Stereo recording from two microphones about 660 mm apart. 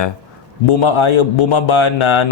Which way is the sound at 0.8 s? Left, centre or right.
Left.